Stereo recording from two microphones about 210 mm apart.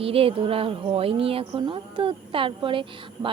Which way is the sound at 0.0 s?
25° right (ahead or behind).